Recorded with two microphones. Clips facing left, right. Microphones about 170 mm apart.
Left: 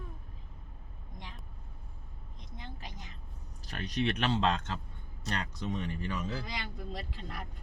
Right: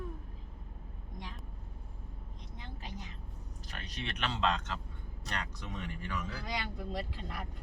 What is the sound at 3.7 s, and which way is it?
Speech, 35° left (ahead or behind).